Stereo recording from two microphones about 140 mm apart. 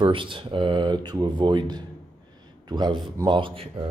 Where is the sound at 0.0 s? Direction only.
35° right (ahead or behind).